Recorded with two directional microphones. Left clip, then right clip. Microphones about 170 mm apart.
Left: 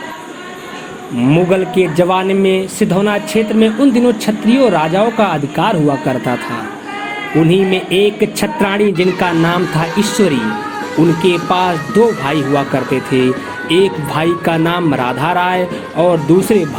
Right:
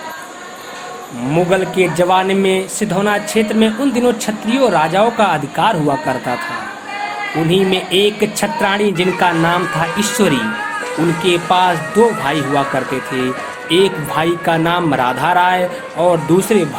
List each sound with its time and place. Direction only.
1.3 s speech: 35° left (ahead or behind)
7.5 s speech: 30° left (ahead or behind)